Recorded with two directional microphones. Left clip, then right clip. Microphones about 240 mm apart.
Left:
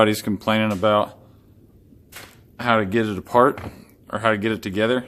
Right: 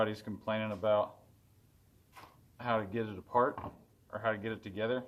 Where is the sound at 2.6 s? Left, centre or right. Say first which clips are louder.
Left 14 dB; left.